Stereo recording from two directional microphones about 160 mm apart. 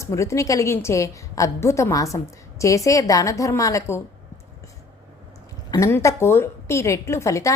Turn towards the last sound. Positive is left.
turn(degrees=20)  # may be behind; listen again after turning